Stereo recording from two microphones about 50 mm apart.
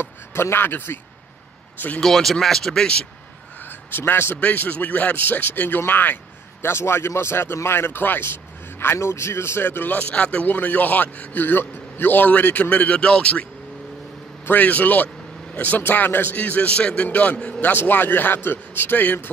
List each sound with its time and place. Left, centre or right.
0.0 s speech: left
2.0 s speech: centre
3.9 s a man's voice: left
4.4 s a man's voice: left
6.6 s a man's voice: left
9.9 s a man's voice: left
14.4 s a man's voice: left
16.3 s a man's voice: left
17.6 s a man's voice: left